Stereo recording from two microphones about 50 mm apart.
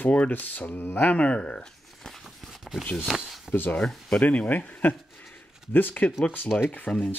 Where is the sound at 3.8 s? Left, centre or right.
Centre.